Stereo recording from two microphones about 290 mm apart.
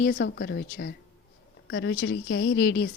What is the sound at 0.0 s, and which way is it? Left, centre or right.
Speech, left.